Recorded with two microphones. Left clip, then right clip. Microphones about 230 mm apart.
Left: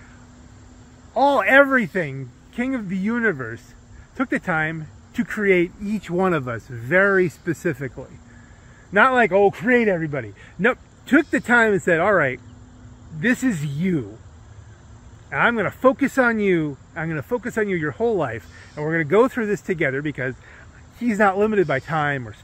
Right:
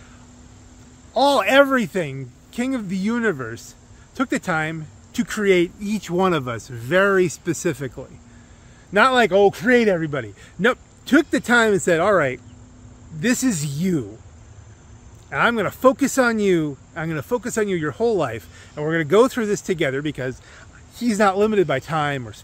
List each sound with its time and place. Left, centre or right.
1.1 s speech: centre
15.2 s speech: centre